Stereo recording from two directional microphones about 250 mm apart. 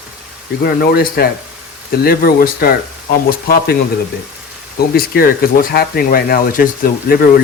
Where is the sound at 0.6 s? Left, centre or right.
Left.